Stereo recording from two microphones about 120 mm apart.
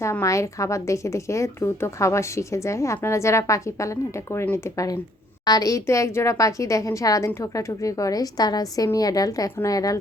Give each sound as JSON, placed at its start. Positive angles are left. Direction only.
{"t": 0.0, "sound": "a woman's voice", "side_deg": 25}
{"t": 5.5, "sound": "a woman's voice", "side_deg": 30}